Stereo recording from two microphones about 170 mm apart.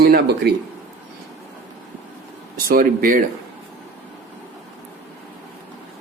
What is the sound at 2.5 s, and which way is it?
Speech, 55° right (ahead or behind).